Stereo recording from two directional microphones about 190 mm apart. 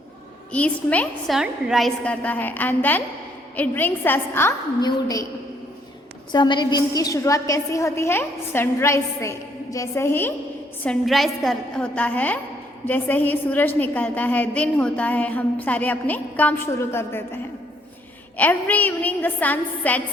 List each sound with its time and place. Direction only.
0.5 s a woman's voice: 5° left (ahead or behind)
6.3 s a woman's voice: 25° left (ahead or behind)
10.8 s a woman's voice: centre (ahead or behind)
18.3 s a woman's voice: 10° left (ahead or behind)